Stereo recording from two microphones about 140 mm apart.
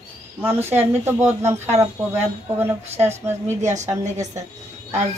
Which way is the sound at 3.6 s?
55° right (ahead or behind).